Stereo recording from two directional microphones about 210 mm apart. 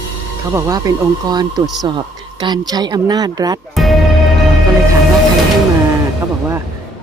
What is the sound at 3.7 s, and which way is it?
Speech, centre (ahead or behind).